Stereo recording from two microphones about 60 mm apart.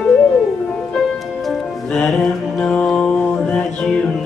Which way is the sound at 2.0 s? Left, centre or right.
Centre.